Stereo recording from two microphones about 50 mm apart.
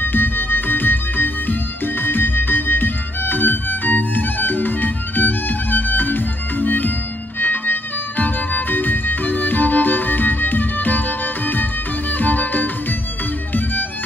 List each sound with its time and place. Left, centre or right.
0.0 s music: left
12.2 s music: left